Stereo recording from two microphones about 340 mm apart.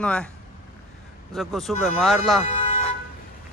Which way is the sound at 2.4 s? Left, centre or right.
Centre.